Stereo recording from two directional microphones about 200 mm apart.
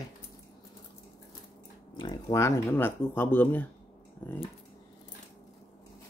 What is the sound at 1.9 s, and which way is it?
Speech, 20° left (ahead or behind).